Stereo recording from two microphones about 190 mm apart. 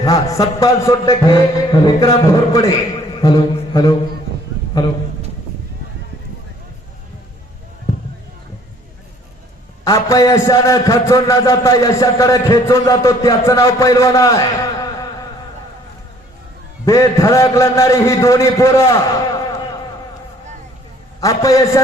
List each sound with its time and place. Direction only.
0.0 s a man's voice: 20° left (ahead or behind)
3.2 s a sound: 25° left (ahead or behind)
9.8 s a man's voice: 15° left (ahead or behind)
16.8 s a man's voice: 15° left (ahead or behind)
21.2 s a man's voice: 20° left (ahead or behind)